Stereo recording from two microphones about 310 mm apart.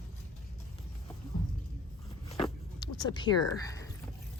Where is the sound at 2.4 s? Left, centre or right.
Centre.